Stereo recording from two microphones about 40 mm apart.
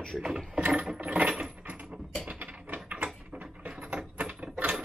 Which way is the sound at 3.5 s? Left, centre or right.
Right.